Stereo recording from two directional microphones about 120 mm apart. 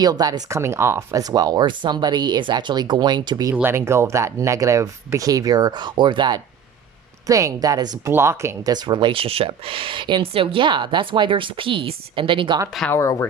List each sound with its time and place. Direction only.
0.0 s speech: 35° right (ahead or behind)
3.5 s speech: 20° right (ahead or behind); by 6.4 s 40° right (ahead or behind)
7.3 s speech: 30° right (ahead or behind)
8.7 s speech: 35° right (ahead or behind)
12.9 s speech: 25° left (ahead or behind)